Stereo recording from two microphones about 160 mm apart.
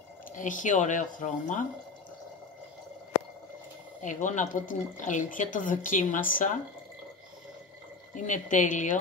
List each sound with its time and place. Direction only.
0.4 s speech: 55° left (ahead or behind)
4.0 s speech: 50° left (ahead or behind)
8.1 s speech: 50° left (ahead or behind)